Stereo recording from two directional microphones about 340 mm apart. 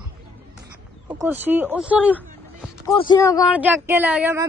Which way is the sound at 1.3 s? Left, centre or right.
Centre.